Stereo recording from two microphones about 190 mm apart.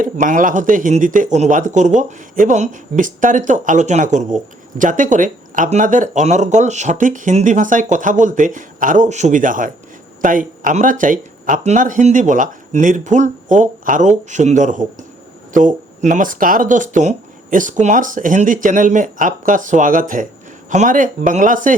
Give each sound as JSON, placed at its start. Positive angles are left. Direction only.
{"t": 0.0, "sound": "speech", "side_deg": -45}